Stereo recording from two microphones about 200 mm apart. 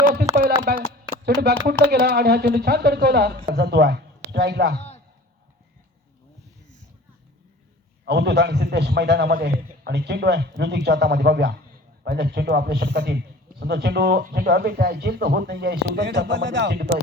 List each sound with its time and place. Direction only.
0.0 s a sound: 50° right (ahead or behind)
0.7 s a man's voice: 50° right (ahead or behind)
8.0 s a man's voice: 55° right (ahead or behind)